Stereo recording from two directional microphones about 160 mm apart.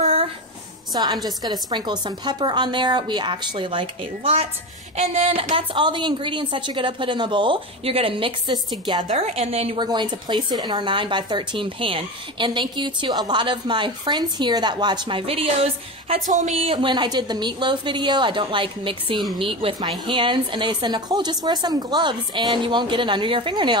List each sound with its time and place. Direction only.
0.0 s a sound: 40° right (ahead or behind)
0.9 s a woman's voice: 25° right (ahead or behind); by 9.8 s 40° right (ahead or behind)
9.8 s speech: 30° right (ahead or behind)
16.3 s speech: 50° right (ahead or behind)
16.7 s speech: 30° right (ahead or behind)